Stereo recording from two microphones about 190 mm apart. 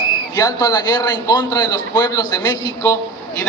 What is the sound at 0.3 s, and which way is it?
A woman's voice, 20° left (ahead or behind).